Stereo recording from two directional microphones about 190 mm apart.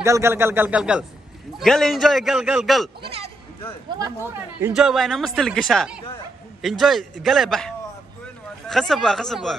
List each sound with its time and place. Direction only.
0.0 s a man's voice: 15° right (ahead or behind)
3.0 s speech: 30° right (ahead or behind)
3.9 s a man's voice: 15° right (ahead or behind)
4.7 s a man's voice: centre (ahead or behind)